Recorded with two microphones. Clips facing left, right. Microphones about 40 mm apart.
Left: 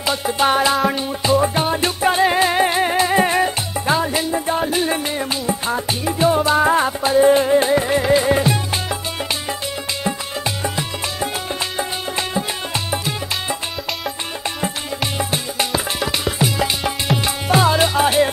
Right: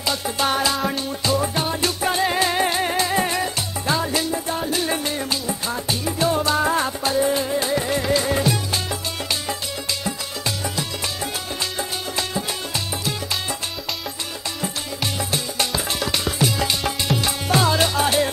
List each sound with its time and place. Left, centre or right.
0.0 s music: left
7.2 s music: left
10.0 s music: left
15.1 s music: left